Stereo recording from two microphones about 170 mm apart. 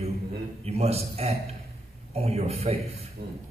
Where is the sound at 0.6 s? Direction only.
40° right (ahead or behind).